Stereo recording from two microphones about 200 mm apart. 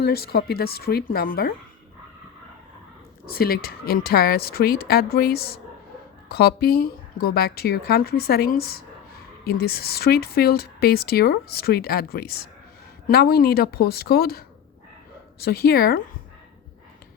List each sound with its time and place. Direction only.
0.0 s speech: 50° left (ahead or behind)
3.3 s speech: 50° left (ahead or behind)